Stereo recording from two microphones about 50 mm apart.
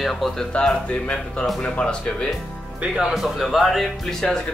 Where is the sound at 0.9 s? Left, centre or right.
Left.